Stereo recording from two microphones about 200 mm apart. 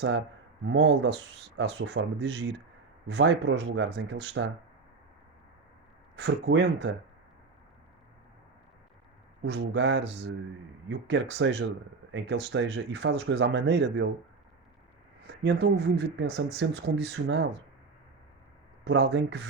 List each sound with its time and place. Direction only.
0.0 s speech: 65° right (ahead or behind)
6.1 s speech: 60° right (ahead or behind)
9.4 s speech: 60° right (ahead or behind)
15.3 s speech: 55° right (ahead or behind)
18.9 s speech: 60° right (ahead or behind)